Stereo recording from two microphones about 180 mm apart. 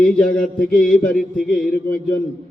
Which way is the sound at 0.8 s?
50° left (ahead or behind).